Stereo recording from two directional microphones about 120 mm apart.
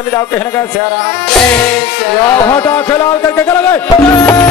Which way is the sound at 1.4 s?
20° left (ahead or behind).